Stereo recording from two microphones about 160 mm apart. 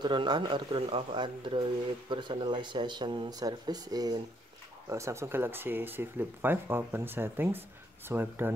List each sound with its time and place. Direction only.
0.0 s speech: 30° right (ahead or behind); by 8.5 s 15° right (ahead or behind)